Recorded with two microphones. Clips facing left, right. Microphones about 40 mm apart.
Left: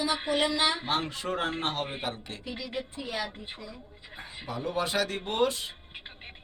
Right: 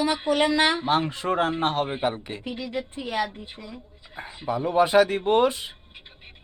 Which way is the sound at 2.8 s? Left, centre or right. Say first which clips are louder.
Right 7 dB; right.